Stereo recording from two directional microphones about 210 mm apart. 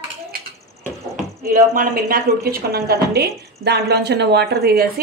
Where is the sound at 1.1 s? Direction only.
40° right (ahead or behind).